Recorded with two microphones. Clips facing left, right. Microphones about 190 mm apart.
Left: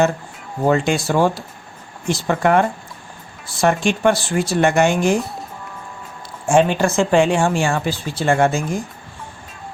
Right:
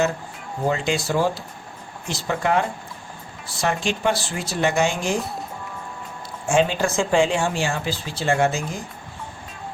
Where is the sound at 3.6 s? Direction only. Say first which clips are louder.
Left 6 dB; 55° left (ahead or behind).